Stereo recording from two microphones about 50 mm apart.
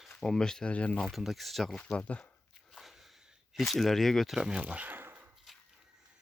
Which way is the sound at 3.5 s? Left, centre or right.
Centre.